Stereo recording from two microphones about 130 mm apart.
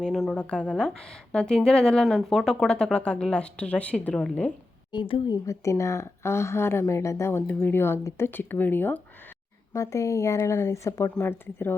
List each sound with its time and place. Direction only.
0.0 s a woman's voice: 5° left (ahead or behind)
4.9 s a woman's voice: 40° left (ahead or behind)
5.3 s a woman's voice: 25° left (ahead or behind)